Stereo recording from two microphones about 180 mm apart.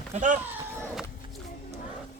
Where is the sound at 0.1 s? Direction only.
40° right (ahead or behind).